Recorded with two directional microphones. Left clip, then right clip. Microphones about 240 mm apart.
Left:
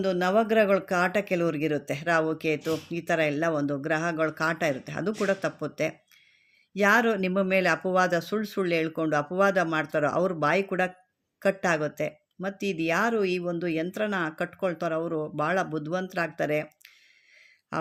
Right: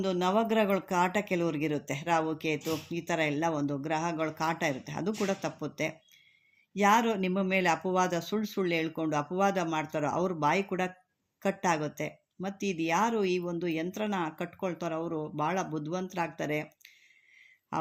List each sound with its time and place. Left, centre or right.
0.0 s speech: centre